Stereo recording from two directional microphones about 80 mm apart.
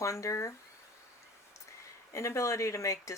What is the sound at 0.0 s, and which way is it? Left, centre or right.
Speech, left.